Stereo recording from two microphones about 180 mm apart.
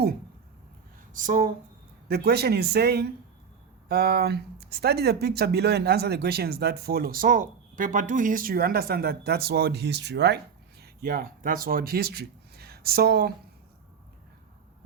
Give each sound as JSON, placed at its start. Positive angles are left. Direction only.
{"t": 1.1, "sound": "speech", "side_deg": -45}
{"t": 2.0, "sound": "speech", "side_deg": -60}